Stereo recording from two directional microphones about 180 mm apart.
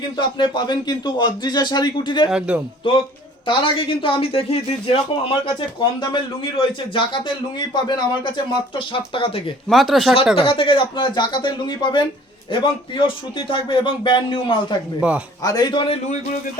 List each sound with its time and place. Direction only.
0.2 s speech: 25° left (ahead or behind)
3.4 s speech: 30° left (ahead or behind)
9.6 s speech: centre (ahead or behind)
10.3 s speech: 30° left (ahead or behind)
15.0 s speech: 5° right (ahead or behind)
15.4 s speech: 20° left (ahead or behind)